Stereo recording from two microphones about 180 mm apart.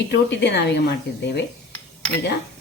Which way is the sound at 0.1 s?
75° left (ahead or behind).